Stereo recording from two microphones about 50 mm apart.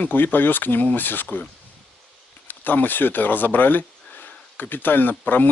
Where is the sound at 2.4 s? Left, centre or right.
Left.